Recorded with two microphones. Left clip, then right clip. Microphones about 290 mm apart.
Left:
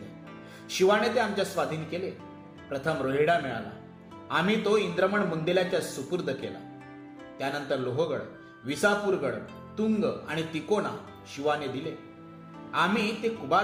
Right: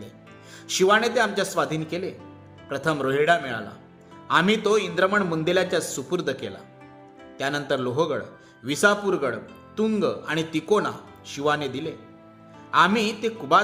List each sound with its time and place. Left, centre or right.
0.7 s speech: right
7.3 s speech: right